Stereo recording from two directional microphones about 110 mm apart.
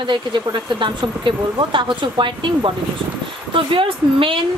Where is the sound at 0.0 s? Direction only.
45° right (ahead or behind).